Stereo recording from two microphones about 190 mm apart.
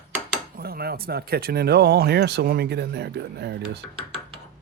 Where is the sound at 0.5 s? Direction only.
55° right (ahead or behind).